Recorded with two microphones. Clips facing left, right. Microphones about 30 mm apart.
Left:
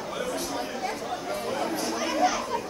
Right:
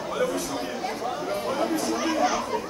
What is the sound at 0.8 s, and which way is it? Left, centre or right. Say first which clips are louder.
Chatter: right 2 dB; centre.